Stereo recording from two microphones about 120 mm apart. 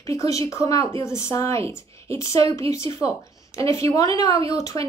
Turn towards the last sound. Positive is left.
turn(degrees=30)  # may be behind; listen again after turning